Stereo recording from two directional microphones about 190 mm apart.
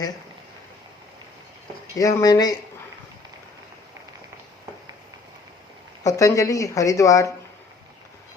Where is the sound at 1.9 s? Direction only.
20° left (ahead or behind).